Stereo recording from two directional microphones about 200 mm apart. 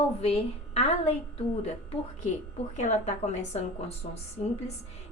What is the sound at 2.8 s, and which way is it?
A woman's voice, 35° left (ahead or behind).